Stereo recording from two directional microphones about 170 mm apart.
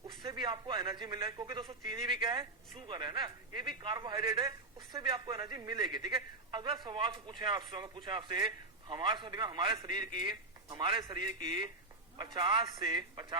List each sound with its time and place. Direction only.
0.2 s a man's voice: 30° right (ahead or behind)